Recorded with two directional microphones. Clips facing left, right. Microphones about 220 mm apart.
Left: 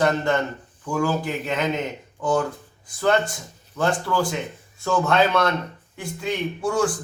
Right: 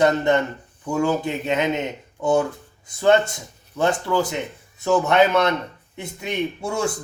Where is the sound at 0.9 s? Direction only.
25° right (ahead or behind).